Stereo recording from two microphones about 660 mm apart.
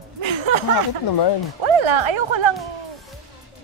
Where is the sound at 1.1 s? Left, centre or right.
Left.